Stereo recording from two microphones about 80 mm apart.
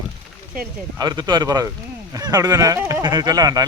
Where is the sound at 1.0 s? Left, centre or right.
Right.